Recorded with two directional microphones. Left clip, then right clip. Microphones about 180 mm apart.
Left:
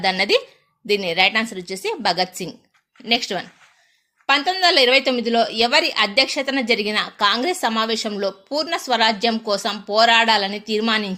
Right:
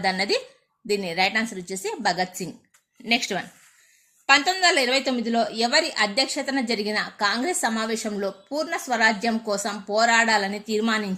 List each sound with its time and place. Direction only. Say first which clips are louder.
0.0 s a woman's voice: left 5 dB; 15° left (ahead or behind)
4.3 s a woman's voice: left 2 dB; 15° left (ahead or behind)
8.1 s a woman's voice: left 5 dB; 5° left (ahead or behind)